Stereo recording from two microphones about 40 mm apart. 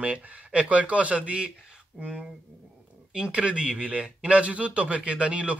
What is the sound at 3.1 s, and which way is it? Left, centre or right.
A man's voice, right.